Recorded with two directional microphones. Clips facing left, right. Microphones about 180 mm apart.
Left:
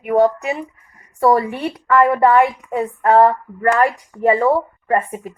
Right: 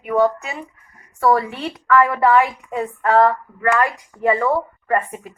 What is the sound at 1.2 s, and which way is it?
Speech, 20° left (ahead or behind).